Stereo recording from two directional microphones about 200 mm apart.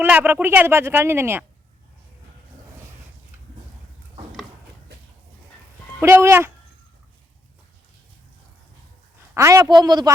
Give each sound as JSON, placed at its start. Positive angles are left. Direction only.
{"t": 0.0, "sound": "speech", "side_deg": -10}
{"t": 6.0, "sound": "speech", "side_deg": -10}
{"t": 9.3, "sound": "a man's voice", "side_deg": -15}